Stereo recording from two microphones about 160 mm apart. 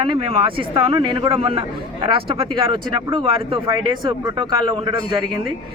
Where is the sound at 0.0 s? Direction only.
35° right (ahead or behind).